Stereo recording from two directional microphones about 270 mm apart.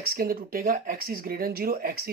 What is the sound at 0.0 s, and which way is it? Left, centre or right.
Speech, right.